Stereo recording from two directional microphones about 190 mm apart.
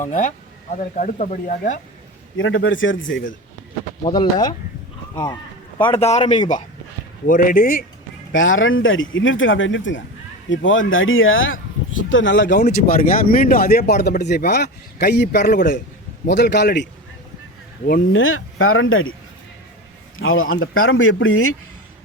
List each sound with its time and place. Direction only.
0.0 s speech: 40° left (ahead or behind)
2.4 s a man's voice: 90° left
4.0 s speech: 25° left (ahead or behind)
5.8 s speech: 30° left (ahead or behind)
7.3 s a man's voice: 50° left (ahead or behind)
8.3 s a man's voice: 90° left; by 12.6 s 70° left (ahead or behind)
12.7 s speech: 45° left (ahead or behind); by 16.9 s 65° left (ahead or behind)
18.1 s speech: 90° left
20.1 s speech: 90° left